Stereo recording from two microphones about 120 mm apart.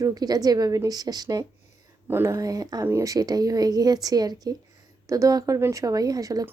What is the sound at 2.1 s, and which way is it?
A woman's voice, 20° right (ahead or behind).